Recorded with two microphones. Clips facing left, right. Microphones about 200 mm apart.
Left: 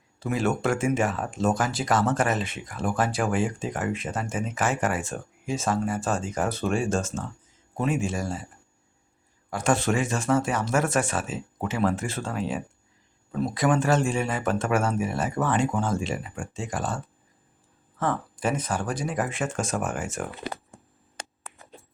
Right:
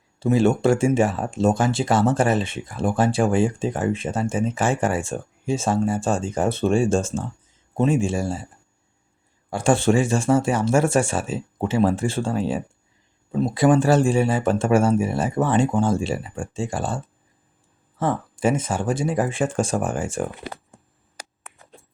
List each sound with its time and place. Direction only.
0.2 s speech: 30° right (ahead or behind)
9.5 s speech: 30° right (ahead or behind)
18.0 s speech: 25° right (ahead or behind)